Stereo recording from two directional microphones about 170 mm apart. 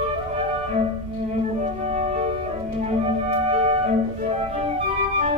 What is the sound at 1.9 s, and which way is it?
Music, 40° right (ahead or behind).